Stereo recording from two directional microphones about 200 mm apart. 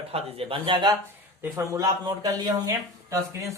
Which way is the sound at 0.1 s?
30° right (ahead or behind).